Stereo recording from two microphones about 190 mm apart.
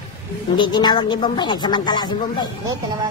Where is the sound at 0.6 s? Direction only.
20° left (ahead or behind).